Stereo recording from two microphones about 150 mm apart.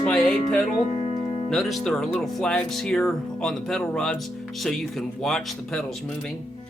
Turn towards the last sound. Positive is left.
turn(degrees=5)  # may be behind; listen again after turning